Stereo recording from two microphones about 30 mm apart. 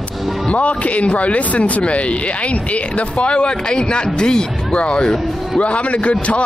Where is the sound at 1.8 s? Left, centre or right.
Left.